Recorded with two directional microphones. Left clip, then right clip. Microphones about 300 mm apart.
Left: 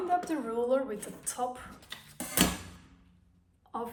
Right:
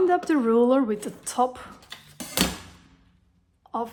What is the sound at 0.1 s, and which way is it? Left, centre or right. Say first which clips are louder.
Speech: right 9 dB; right.